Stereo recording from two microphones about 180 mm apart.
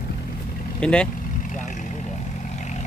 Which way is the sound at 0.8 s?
5° left (ahead or behind).